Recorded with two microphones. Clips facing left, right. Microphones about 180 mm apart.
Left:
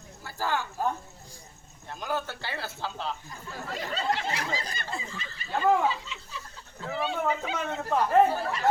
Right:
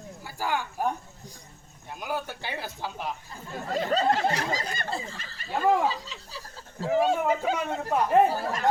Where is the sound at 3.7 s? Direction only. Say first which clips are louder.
Right 6 dB; 40° right (ahead or behind).